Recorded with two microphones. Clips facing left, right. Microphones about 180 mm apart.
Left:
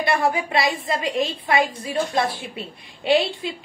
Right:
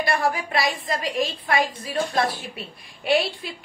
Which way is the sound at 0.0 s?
25° left (ahead or behind).